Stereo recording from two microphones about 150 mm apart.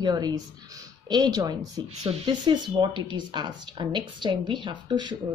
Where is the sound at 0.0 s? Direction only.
25° right (ahead or behind).